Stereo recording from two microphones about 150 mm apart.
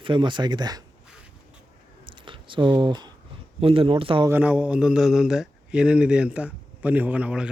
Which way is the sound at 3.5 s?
40° right (ahead or behind).